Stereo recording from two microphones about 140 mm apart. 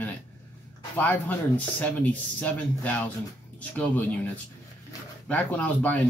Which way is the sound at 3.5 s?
10° left (ahead or behind).